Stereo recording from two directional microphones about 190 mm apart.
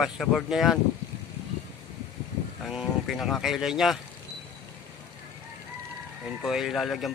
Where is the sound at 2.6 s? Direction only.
Centre (ahead or behind).